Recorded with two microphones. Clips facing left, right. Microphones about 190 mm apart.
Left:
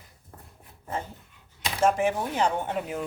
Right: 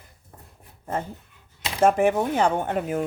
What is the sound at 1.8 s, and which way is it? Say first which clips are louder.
Speech: right 5 dB; 55° right (ahead or behind).